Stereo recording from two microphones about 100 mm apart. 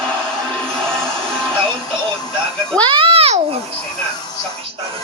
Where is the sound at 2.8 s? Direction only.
60° right (ahead or behind).